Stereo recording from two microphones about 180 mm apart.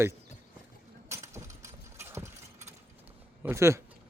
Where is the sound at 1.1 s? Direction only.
15° right (ahead or behind).